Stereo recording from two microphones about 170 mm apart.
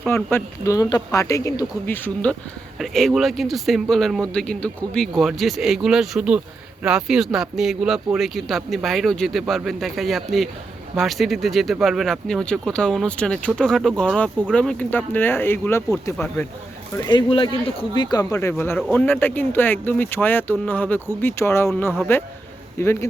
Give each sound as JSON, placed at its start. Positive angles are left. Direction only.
{"t": 0.1, "sound": "speech", "side_deg": 15}